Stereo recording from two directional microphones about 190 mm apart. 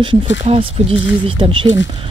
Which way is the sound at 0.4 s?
30° right (ahead or behind).